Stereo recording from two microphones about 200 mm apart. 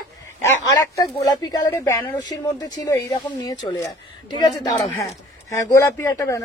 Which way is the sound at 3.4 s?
20° left (ahead or behind).